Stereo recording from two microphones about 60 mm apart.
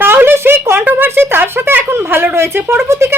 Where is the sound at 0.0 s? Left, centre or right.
Right.